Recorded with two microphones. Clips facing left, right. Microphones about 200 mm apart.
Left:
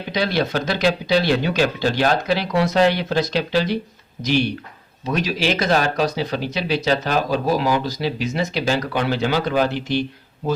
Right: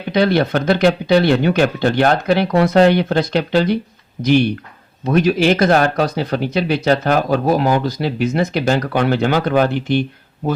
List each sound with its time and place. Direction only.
0.1 s speech: 55° right (ahead or behind)